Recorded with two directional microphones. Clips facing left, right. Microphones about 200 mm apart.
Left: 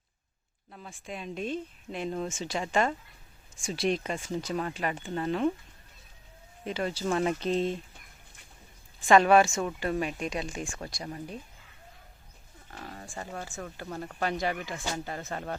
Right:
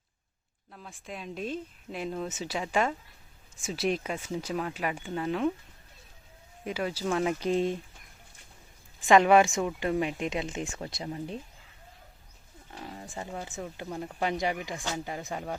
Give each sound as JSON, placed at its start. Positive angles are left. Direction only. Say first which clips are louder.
{"t": 0.7, "sound": "speech", "louder": "left 1 dB", "side_deg": 0}
{"t": 6.7, "sound": "speech", "louder": "even", "side_deg": -5}
{"t": 9.0, "sound": "speech", "louder": "even", "side_deg": -15}
{"t": 12.7, "sound": "speech", "louder": "right 1 dB", "side_deg": -15}